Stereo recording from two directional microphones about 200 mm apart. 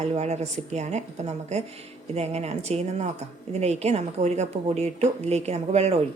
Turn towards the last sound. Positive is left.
turn(degrees=-30)  # may be behind; listen again after turning